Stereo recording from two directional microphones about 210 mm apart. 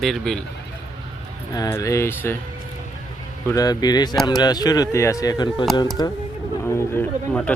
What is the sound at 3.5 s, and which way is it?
Speech, 15° left (ahead or behind).